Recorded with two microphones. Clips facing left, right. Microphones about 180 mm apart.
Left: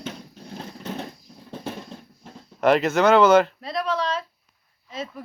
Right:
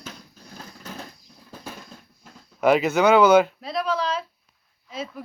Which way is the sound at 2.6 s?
Centre (ahead or behind).